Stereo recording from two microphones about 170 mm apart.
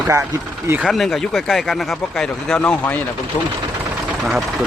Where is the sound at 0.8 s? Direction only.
Centre (ahead or behind).